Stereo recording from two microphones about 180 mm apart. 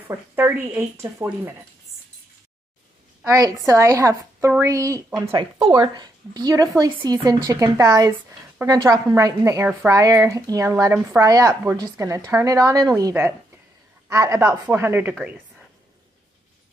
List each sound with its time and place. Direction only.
0.1 s a woman's voice: 10° right (ahead or behind)
3.3 s a woman's voice: 20° right (ahead or behind)